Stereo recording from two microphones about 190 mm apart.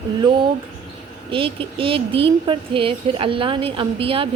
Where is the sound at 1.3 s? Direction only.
30° right (ahead or behind).